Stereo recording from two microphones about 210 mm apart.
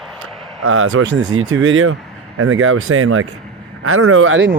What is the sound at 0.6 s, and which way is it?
Speech, 90° right.